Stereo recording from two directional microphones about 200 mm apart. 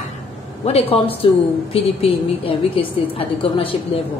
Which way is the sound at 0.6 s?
30° left (ahead or behind).